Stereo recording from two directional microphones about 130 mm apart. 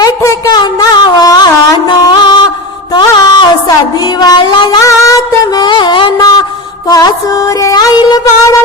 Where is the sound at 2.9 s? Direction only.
30° left (ahead or behind).